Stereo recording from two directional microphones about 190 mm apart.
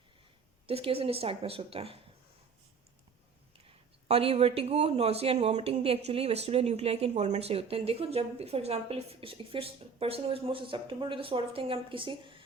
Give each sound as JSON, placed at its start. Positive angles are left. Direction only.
{"t": 0.7, "sound": "speech", "side_deg": -30}
{"t": 4.1, "sound": "speech", "side_deg": -30}